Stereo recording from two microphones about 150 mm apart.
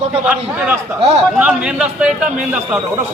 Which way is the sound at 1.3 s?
5° right (ahead or behind).